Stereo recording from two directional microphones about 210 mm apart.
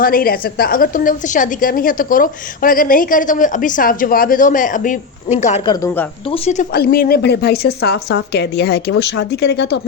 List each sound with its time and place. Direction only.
0.0 s a woman's voice: 45° left (ahead or behind)
5.6 s a woman's voice: 15° left (ahead or behind)
6.3 s a woman's voice: 30° left (ahead or behind)
6.7 s speech: 45° left (ahead or behind)